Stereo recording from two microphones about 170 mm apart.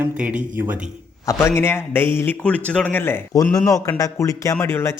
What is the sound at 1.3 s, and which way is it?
A man's voice, 15° left (ahead or behind).